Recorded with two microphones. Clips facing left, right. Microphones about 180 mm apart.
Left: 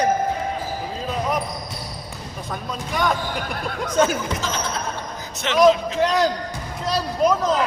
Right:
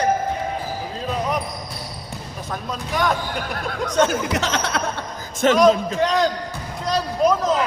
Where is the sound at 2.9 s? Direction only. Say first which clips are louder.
Right 1 dB; centre (ahead or behind).